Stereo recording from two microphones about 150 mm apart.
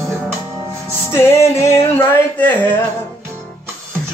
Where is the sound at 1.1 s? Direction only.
15° left (ahead or behind).